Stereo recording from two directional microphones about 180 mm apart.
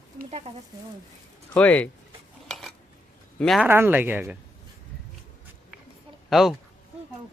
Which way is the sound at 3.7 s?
10° right (ahead or behind).